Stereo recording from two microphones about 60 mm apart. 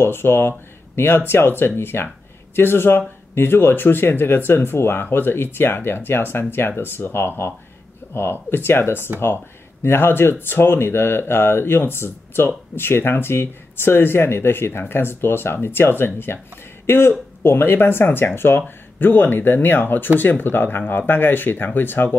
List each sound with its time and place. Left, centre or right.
0.0 s speech: left